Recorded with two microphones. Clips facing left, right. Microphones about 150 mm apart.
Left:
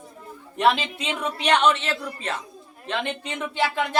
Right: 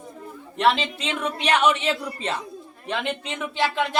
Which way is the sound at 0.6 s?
Centre (ahead or behind).